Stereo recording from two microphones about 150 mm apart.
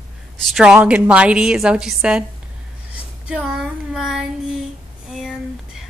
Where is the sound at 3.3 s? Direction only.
5° right (ahead or behind).